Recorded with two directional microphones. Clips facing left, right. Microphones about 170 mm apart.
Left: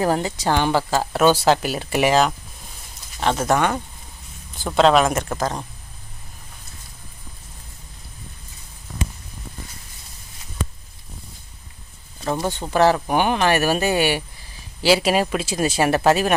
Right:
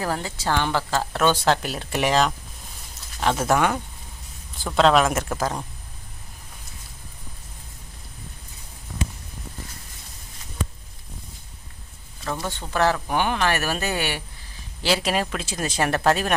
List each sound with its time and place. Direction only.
0.0 s speech: 20° left (ahead or behind); by 5.6 s 5° right (ahead or behind)
12.2 s a sound: 25° left (ahead or behind)
12.7 s speech: 15° left (ahead or behind)